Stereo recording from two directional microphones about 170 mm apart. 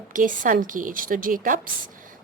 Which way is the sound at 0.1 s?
50° right (ahead or behind).